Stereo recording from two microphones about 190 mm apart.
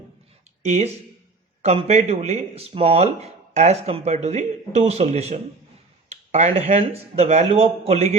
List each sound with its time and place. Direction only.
0.6 s speech: 35° right (ahead or behind)